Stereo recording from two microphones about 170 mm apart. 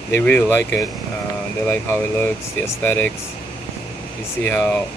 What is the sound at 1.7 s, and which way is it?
Speech, 10° left (ahead or behind).